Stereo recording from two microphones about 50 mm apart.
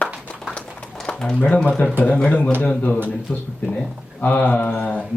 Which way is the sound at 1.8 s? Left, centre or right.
Left.